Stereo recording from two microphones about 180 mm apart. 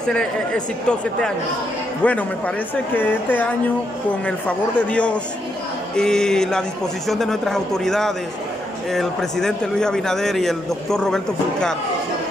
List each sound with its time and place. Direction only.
0.0 s a man's voice: 5° left (ahead or behind)